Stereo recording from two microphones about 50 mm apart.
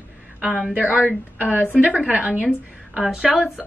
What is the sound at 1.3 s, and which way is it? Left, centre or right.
A woman's voice, right.